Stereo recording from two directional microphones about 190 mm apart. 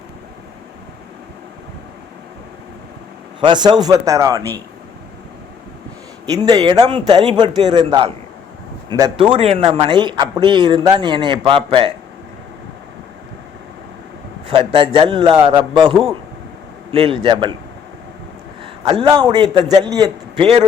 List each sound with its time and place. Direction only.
3.4 s a man's voice: 25° right (ahead or behind)
6.2 s speech: 20° right (ahead or behind)
14.4 s speech: 30° right (ahead or behind)
18.6 s a man's voice: 25° right (ahead or behind)